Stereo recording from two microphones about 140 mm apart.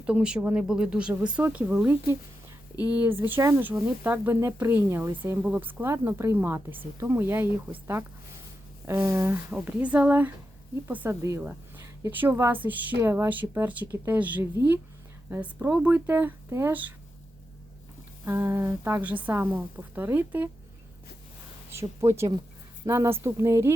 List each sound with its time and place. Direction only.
0.0 s a woman's voice: 10° right (ahead or behind)
9.0 s a woman's voice: 20° right (ahead or behind)
18.3 s a woman's voice: 20° right (ahead or behind)
21.7 s a woman's voice: 20° right (ahead or behind)